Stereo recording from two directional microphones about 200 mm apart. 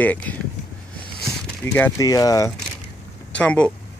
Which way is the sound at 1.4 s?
10° left (ahead or behind).